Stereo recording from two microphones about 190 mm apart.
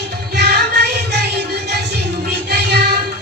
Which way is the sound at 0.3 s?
60° right (ahead or behind).